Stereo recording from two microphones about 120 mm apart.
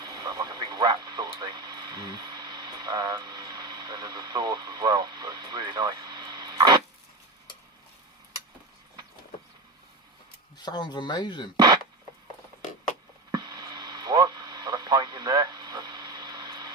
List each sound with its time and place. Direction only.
0.0 s radio: 35° right (ahead or behind)
10.6 s speech: 40° left (ahead or behind)
11.5 s a sound: 35° right (ahead or behind)
13.3 s radio: 35° right (ahead or behind)